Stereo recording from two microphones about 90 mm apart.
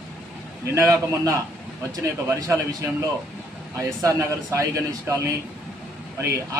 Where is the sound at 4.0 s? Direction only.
35° right (ahead or behind).